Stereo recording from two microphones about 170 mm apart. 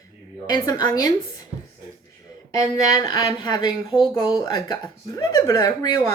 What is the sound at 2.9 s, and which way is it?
Speech, 20° left (ahead or behind).